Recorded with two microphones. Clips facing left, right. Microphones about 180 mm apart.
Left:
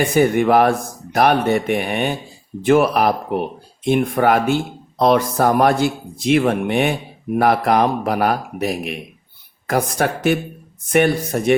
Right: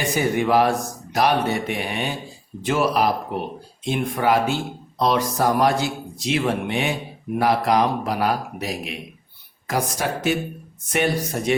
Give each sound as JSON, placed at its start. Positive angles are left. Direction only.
{"t": 0.2, "sound": "speech", "side_deg": 55}